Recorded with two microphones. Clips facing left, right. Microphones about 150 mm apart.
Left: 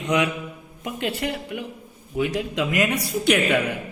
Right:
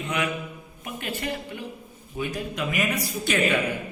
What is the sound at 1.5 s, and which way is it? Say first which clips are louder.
Speech: left 4 dB; 80° left.